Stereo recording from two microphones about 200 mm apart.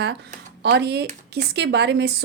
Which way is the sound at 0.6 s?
55° right (ahead or behind).